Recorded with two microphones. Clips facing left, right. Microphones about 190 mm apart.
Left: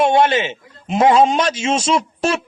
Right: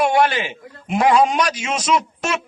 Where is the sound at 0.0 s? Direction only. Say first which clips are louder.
Left 3 dB; 25° left (ahead or behind).